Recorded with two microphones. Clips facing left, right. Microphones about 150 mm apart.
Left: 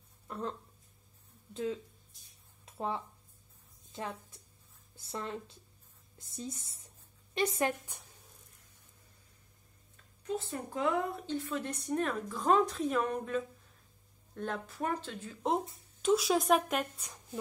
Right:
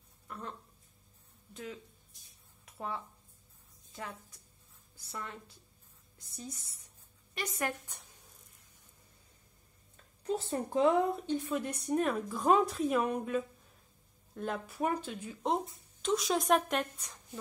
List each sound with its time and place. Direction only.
0.3 s a sound: 30° left (ahead or behind)
1.5 s a woman's voice: 25° left (ahead or behind)
2.6 s a sound: 25° left (ahead or behind)
3.9 s a woman's voice: 25° left (ahead or behind)
10.2 s a woman's voice: 30° right (ahead or behind); by 15.3 s 10° right (ahead or behind)
15.4 s speech: centre (ahead or behind)